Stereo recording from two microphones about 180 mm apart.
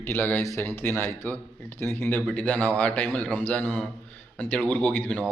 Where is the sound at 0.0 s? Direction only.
10° left (ahead or behind).